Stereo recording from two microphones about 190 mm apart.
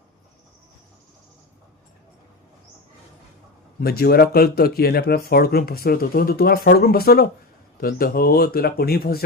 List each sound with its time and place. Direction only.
3.8 s speech: 55° left (ahead or behind)